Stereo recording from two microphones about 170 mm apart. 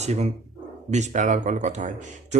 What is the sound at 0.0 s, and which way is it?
Speech, 40° right (ahead or behind).